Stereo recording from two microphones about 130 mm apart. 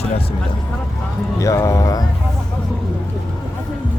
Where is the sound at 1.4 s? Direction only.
25° left (ahead or behind).